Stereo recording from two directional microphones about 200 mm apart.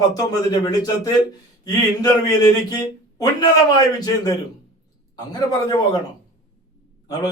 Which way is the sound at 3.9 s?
20° left (ahead or behind).